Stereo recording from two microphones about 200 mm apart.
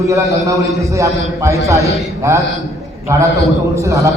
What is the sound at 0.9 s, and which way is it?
Speech, 15° right (ahead or behind).